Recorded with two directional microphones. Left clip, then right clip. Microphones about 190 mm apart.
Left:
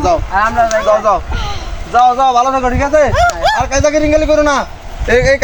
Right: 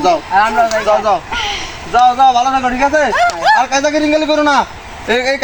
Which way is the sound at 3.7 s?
40° left (ahead or behind).